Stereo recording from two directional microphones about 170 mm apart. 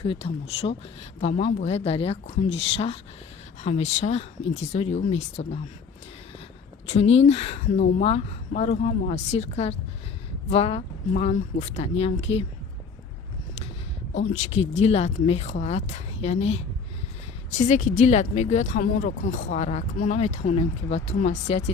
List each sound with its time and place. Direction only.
0.0 s speech: 30° left (ahead or behind)
6.8 s speech: 35° left (ahead or behind)
14.2 s speech: 45° left (ahead or behind)
17.7 s speech: 45° left (ahead or behind)